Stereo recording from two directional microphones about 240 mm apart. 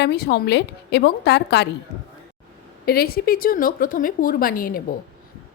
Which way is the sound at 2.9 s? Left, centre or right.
Left.